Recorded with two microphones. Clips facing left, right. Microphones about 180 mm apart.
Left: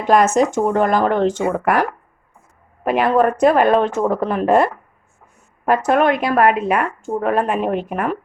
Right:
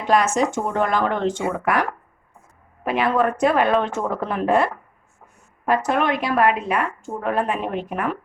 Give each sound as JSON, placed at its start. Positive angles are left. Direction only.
{"t": 0.3, "sound": "a woman's voice", "side_deg": 45}